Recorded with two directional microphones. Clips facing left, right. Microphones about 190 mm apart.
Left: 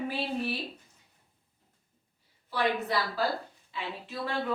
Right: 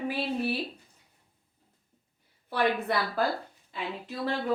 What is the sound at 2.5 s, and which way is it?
Speech, 55° right (ahead or behind).